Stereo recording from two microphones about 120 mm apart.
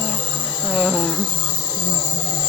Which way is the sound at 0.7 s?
5° right (ahead or behind).